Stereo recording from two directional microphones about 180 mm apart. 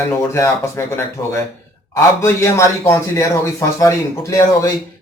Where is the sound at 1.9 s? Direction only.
15° left (ahead or behind).